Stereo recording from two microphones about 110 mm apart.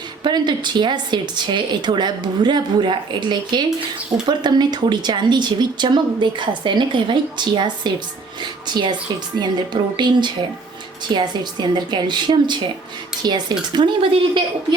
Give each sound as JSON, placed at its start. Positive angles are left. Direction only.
{"t": 0.2, "sound": "speech", "side_deg": -45}
{"t": 10.0, "sound": "speech", "side_deg": -45}